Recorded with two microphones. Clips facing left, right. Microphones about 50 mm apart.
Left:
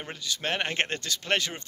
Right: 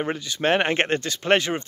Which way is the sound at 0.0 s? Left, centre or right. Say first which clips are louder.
Right 9 dB; right.